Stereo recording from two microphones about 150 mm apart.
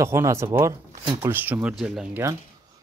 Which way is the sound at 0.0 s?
20° right (ahead or behind).